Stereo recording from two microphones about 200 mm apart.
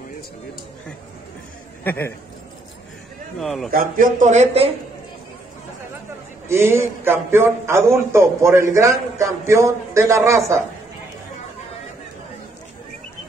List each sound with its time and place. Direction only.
1.9 s speech: 10° left (ahead or behind)
3.3 s a man's voice: centre (ahead or behind)
3.7 s speech: 45° right (ahead or behind)
6.5 s a man's voice: 10° right (ahead or behind)